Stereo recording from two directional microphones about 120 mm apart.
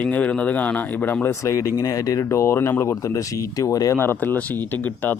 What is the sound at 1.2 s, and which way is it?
Speech, 25° left (ahead or behind).